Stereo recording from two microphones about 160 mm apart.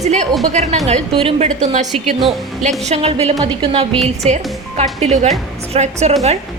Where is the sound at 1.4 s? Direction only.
50° right (ahead or behind).